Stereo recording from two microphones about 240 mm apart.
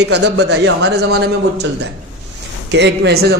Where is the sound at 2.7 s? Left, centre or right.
Right.